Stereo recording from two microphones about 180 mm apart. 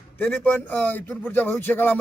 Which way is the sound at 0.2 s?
10° left (ahead or behind).